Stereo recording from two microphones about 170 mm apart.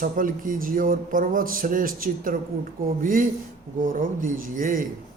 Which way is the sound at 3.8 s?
55° right (ahead or behind).